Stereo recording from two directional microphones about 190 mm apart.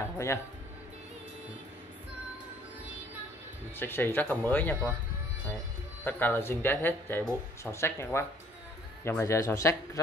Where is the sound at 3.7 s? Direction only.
10° left (ahead or behind).